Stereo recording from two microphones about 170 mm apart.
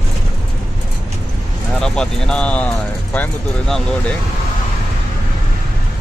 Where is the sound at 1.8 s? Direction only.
5° left (ahead or behind).